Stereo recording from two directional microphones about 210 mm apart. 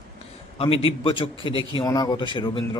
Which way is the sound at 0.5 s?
25° left (ahead or behind).